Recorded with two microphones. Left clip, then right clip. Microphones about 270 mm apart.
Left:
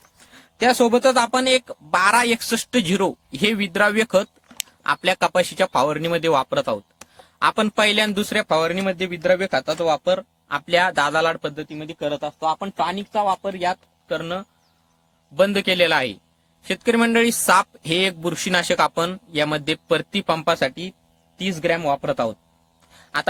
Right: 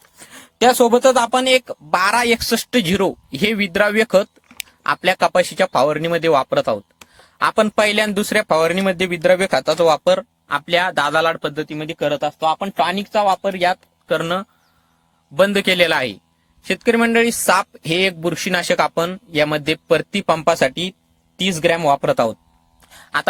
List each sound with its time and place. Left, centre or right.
0.3 s a man's voice: centre
15.4 s a man's voice: centre
22.9 s a sound: centre